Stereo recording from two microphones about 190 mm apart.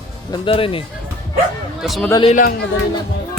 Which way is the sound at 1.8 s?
Centre (ahead or behind).